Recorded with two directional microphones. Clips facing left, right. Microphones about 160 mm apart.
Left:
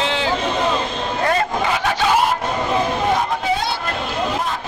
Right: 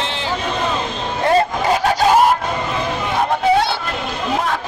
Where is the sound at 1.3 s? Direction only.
40° right (ahead or behind).